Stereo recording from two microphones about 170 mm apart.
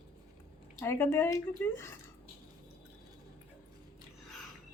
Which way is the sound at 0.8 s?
15° left (ahead or behind).